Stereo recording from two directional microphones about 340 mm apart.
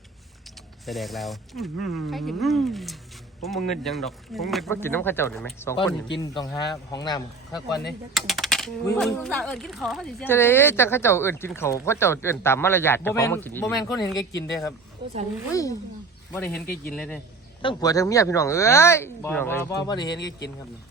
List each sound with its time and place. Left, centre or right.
0.9 s speech: centre
8.1 s speech: centre
15.0 s speech: centre
16.3 s speech: centre